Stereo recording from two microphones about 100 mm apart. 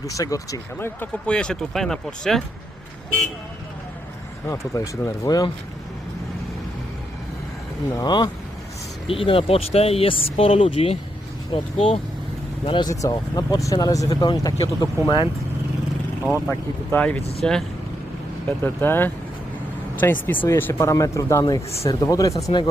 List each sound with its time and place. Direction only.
0.0 s speech: 35° left (ahead or behind)
0.8 s speech: 20° left (ahead or behind)
1.3 s speech: 10° left (ahead or behind)
4.4 s speech: 35° left (ahead or behind)
7.9 s speech: 45° left (ahead or behind)
9.0 s speech: 65° left (ahead or behind)
12.6 s speech: 50° left (ahead or behind)
12.9 s speech: 35° left (ahead or behind)
16.3 s speech: 25° left (ahead or behind)
17.0 s speech: 15° left (ahead or behind)
18.6 s speech: 20° left (ahead or behind)